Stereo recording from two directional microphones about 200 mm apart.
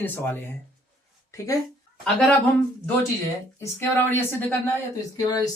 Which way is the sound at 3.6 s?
10° left (ahead or behind).